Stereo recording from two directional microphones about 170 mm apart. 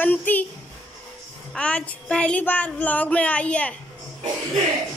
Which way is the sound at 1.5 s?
5° left (ahead or behind).